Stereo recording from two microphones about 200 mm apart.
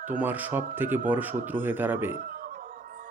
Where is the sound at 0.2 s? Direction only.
10° right (ahead or behind).